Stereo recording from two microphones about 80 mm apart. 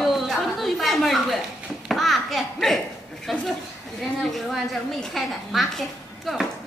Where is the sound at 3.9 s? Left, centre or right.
Centre.